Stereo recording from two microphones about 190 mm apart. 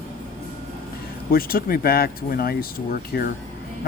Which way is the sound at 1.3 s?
50° left (ahead or behind).